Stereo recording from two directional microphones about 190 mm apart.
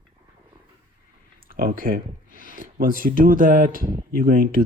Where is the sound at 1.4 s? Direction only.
45° right (ahead or behind).